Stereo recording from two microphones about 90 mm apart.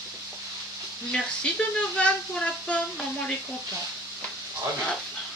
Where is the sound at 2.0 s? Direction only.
15° left (ahead or behind).